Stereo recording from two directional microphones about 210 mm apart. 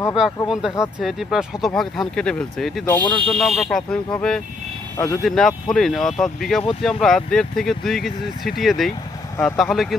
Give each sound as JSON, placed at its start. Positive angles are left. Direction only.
{"t": 0.5, "sound": "speech", "side_deg": 0}